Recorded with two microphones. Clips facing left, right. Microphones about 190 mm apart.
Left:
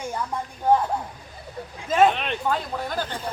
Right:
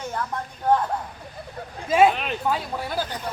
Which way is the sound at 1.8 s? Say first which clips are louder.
Right 1 dB; 10° right (ahead or behind).